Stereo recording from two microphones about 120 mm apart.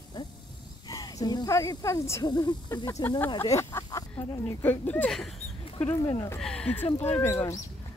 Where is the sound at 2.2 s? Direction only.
35° left (ahead or behind).